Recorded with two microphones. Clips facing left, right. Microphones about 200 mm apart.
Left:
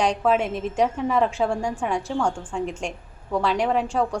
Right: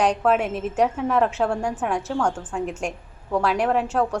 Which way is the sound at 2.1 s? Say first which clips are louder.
Right 1 dB; 10° left (ahead or behind).